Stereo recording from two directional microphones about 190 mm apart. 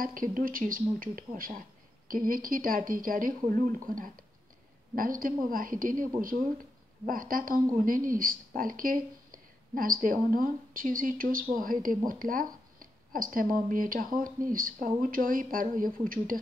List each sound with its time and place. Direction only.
0.0 s speech: 45° right (ahead or behind)
7.1 s speech: 45° right (ahead or behind)